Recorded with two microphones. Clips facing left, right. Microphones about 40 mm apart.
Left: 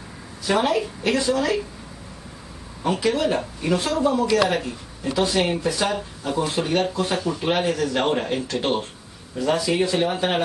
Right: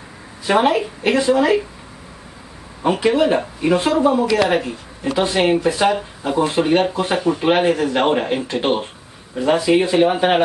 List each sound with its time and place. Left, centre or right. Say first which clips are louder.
0.5 s speech: right 5 dB; right
2.8 s speech: right 6 dB; right